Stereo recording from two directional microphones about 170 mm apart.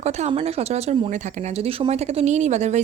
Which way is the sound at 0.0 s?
40° right (ahead or behind).